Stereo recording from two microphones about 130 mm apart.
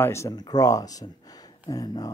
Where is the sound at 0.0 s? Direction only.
20° left (ahead or behind).